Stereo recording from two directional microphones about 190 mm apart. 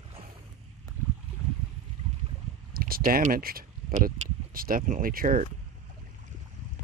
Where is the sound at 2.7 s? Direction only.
50° right (ahead or behind).